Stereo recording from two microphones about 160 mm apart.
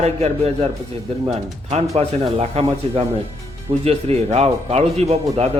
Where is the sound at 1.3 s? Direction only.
40° right (ahead or behind).